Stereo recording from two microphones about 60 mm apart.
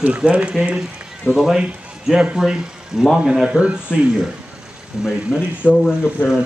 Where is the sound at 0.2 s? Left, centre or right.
Centre.